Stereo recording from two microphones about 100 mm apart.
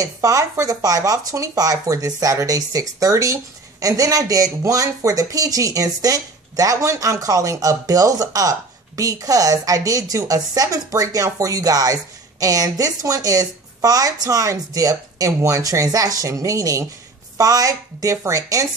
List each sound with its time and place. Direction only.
0.0 s speech: 35° right (ahead or behind)